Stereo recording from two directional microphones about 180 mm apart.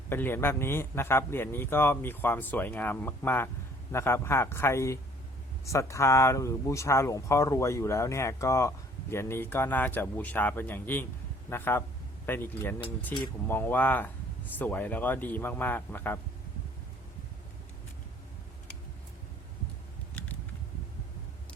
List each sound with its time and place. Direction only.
0.1 s speech: 10° left (ahead or behind)